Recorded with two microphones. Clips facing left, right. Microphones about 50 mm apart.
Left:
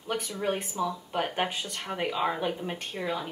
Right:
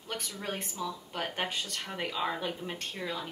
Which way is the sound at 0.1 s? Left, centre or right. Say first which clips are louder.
Left 7 dB; left.